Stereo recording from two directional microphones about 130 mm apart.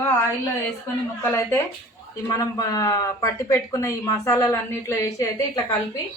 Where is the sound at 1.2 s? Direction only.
20° left (ahead or behind).